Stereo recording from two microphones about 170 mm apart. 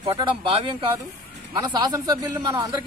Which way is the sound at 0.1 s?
30° right (ahead or behind).